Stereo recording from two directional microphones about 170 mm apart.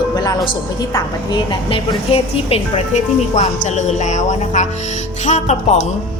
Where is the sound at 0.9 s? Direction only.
30° left (ahead or behind).